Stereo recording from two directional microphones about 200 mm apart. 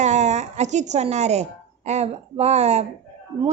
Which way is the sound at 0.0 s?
35° right (ahead or behind).